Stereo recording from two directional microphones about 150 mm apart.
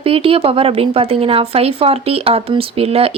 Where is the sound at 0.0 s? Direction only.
40° right (ahead or behind).